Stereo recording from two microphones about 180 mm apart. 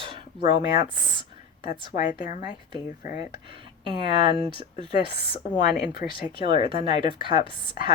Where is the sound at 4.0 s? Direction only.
30° right (ahead or behind).